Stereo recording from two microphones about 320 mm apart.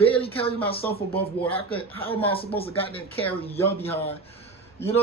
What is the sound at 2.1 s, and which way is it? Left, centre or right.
Speech, centre.